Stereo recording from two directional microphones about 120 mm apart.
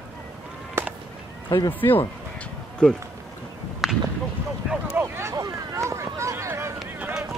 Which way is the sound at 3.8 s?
Centre (ahead or behind).